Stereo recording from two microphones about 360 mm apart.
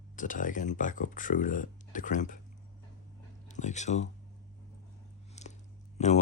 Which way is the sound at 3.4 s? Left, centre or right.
Centre.